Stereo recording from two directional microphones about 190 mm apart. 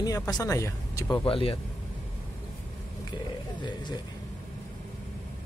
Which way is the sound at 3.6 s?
25° left (ahead or behind).